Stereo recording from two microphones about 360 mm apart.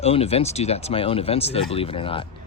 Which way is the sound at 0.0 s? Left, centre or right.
Centre.